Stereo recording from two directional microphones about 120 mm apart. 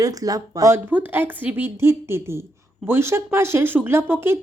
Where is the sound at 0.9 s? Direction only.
15° right (ahead or behind).